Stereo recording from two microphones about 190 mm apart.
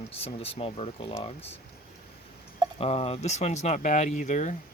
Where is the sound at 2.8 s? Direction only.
35° left (ahead or behind).